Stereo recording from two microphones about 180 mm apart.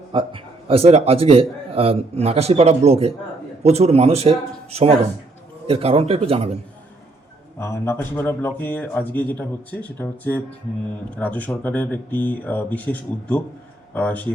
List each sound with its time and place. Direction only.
0.1 s a man's voice: 30° right (ahead or behind)
7.6 s speech: 15° left (ahead or behind)